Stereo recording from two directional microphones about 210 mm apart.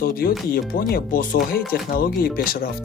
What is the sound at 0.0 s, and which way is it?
Speech, 45° left (ahead or behind).